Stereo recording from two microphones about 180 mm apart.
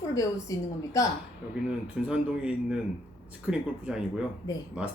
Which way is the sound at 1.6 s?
5° right (ahead or behind).